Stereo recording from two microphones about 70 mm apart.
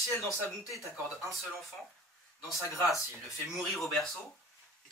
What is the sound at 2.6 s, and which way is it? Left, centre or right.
Speech, left.